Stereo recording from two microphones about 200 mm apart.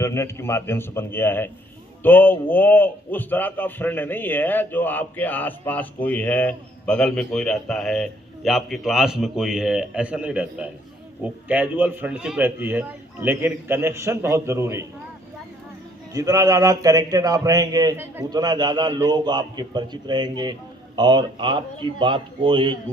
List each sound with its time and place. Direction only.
0.0 s a man's voice: 15° left (ahead or behind); by 14.8 s 15° right (ahead or behind)
16.1 s speech: 15° right (ahead or behind)